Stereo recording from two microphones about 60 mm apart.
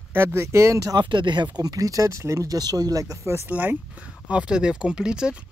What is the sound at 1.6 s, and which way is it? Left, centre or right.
Speech, right.